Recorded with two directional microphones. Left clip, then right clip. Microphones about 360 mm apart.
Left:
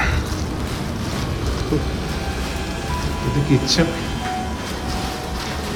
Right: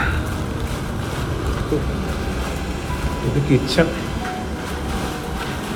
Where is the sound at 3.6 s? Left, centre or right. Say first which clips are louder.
Right 1 dB; centre.